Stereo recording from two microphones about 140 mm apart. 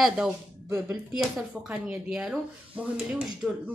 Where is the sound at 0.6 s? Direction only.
15° right (ahead or behind).